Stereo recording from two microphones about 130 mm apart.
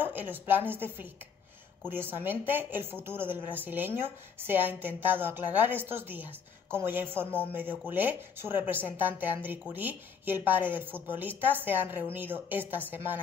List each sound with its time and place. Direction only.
0.0 s speech: 15° right (ahead or behind)